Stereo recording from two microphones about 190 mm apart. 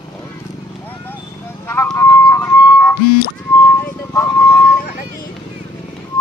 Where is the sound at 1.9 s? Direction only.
15° left (ahead or behind).